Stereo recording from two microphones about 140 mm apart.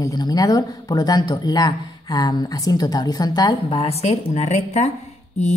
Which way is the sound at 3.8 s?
45° left (ahead or behind).